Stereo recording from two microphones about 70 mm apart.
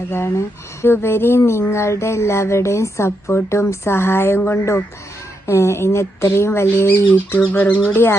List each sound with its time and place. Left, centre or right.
0.3 s speech: left